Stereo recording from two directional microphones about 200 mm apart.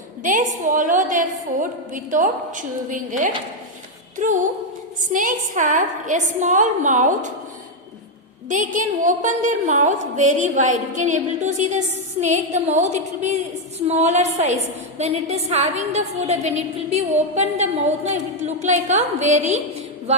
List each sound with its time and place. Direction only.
0.2 s a woman's voice: 40° right (ahead or behind)
8.4 s a woman's voice: 40° right (ahead or behind)